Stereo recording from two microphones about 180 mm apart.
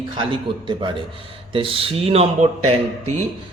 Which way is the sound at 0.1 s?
30° right (ahead or behind).